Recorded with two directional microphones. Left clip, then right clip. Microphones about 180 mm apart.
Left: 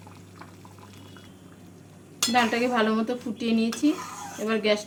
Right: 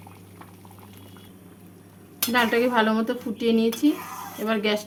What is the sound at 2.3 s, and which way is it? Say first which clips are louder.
Cutlery: right 3 dB; 25° right (ahead or behind).